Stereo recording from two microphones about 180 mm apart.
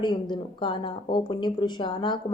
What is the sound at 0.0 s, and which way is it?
A woman's voice, 25° left (ahead or behind).